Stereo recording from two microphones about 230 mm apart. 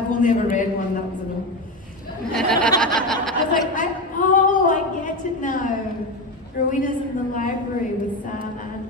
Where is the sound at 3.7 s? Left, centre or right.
Left.